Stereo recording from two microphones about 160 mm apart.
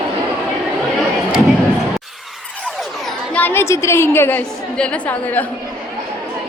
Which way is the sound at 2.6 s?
Centre (ahead or behind).